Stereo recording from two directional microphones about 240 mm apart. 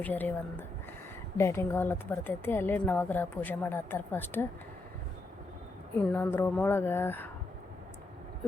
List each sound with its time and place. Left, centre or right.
0.0 s a woman's voice: centre
1.4 s a woman's voice: centre
6.0 s a woman's voice: centre